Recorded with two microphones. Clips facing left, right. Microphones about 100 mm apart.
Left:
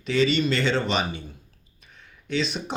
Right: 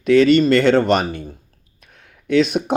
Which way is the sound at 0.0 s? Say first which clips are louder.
Right 10 dB; 55° right (ahead or behind).